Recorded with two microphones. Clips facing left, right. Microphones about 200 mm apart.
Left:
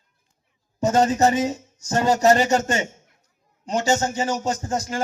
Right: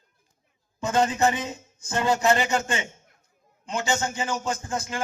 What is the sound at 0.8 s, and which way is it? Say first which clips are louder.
A man's voice: left 5 dB; 40° left (ahead or behind).